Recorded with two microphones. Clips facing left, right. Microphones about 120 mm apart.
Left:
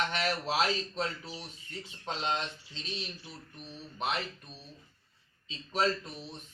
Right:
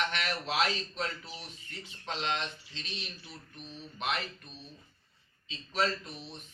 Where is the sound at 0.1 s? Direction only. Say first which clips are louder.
Left 2 dB; 35° left (ahead or behind).